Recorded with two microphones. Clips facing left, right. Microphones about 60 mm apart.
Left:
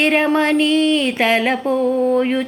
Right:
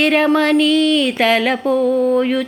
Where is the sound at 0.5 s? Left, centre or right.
Left.